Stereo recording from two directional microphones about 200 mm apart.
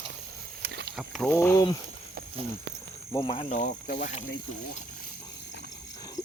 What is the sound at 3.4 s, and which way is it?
Speech, 40° left (ahead or behind).